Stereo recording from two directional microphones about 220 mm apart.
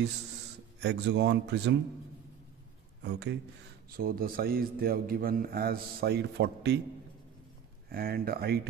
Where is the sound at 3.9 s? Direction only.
40° right (ahead or behind).